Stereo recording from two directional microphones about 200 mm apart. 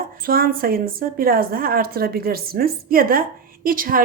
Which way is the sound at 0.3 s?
45° right (ahead or behind).